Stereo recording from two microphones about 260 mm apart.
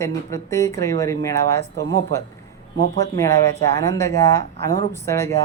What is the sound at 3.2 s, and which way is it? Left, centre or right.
Speech, centre.